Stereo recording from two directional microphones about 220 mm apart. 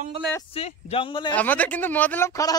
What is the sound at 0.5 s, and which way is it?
Speech, 25° left (ahead or behind).